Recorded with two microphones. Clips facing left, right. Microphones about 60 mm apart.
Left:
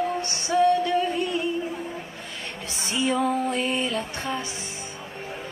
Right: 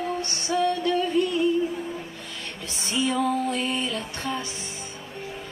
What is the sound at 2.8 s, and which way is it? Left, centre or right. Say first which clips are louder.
Music: left 1 dB; left.